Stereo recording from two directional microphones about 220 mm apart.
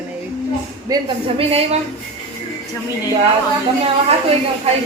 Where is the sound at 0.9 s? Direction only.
25° right (ahead or behind).